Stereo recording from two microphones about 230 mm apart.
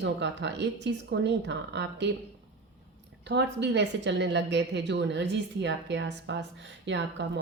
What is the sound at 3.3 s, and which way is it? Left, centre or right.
Speech, right.